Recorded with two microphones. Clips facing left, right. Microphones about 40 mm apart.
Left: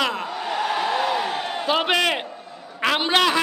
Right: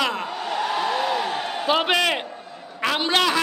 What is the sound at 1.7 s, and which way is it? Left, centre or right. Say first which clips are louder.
Speech: right 1 dB; centre.